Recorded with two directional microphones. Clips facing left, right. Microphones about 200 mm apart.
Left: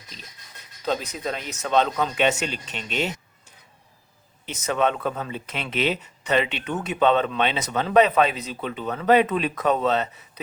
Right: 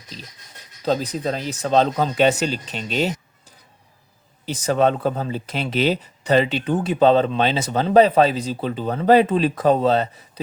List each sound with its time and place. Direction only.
0.9 s speech: 35° right (ahead or behind)